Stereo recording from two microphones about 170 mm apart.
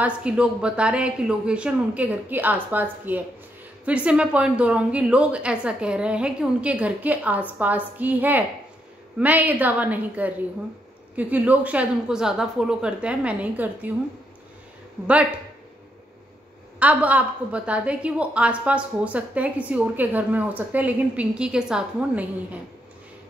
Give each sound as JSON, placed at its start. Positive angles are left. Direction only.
{"t": 0.0, "sound": "a woman's voice", "side_deg": -5}
{"t": 16.8, "sound": "a woman's voice", "side_deg": -10}